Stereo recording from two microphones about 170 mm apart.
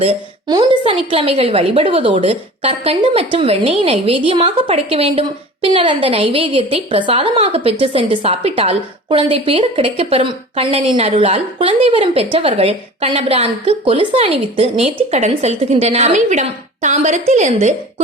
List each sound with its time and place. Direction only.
0.0 s a woman's voice: 30° right (ahead or behind)